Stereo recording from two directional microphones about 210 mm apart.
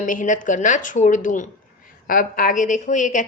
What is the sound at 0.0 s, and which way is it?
A woman's voice, 40° left (ahead or behind).